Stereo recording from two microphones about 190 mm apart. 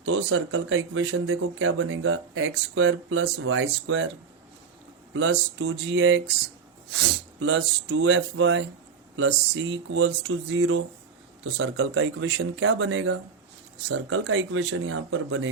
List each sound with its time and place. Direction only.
0.0 s speech: 90° right
5.1 s speech: 90° right
7.0 s speech: 90° right